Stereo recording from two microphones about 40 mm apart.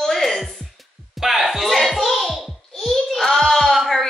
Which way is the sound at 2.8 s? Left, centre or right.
Centre.